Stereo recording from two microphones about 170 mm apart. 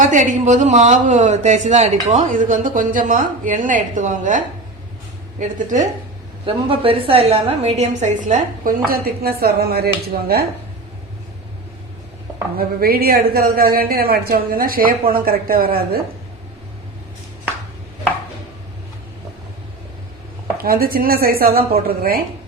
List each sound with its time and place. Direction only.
0.0 s speech: 50° right (ahead or behind)
6.4 s speech: 30° right (ahead or behind); by 10.4 s 65° right (ahead or behind)
12.5 s speech: 65° right (ahead or behind)
20.7 s speech: 60° right (ahead or behind)